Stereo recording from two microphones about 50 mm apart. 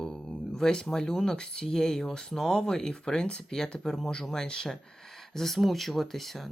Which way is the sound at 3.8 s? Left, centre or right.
Centre.